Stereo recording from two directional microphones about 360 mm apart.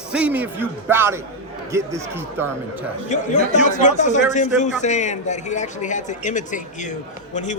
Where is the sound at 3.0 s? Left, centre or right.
Centre.